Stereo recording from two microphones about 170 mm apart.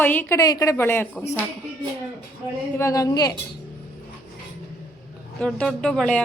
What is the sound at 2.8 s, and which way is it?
Speech, 20° left (ahead or behind).